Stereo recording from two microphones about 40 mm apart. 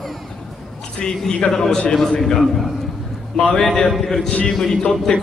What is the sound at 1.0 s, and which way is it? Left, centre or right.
A man's voice, centre.